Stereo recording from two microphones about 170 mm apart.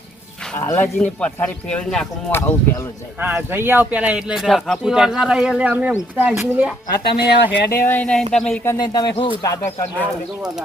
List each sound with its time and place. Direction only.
0.5 s speech: 15° left (ahead or behind)
3.2 s a man's voice: 10° right (ahead or behind)
7.2 s speech: 65° left (ahead or behind)
7.9 s a man's voice: 10° left (ahead or behind)
8.6 s speech: 20° left (ahead or behind)